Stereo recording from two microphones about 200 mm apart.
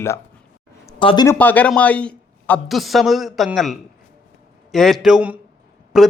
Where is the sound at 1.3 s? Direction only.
10° left (ahead or behind).